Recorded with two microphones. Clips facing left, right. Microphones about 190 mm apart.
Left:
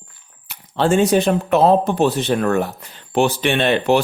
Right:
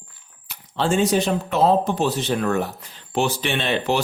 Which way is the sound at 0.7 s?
55° left (ahead or behind).